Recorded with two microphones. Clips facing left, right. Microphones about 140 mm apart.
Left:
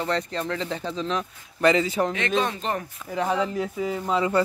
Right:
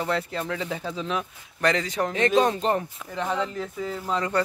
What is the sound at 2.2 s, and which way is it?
Speech, 40° right (ahead or behind).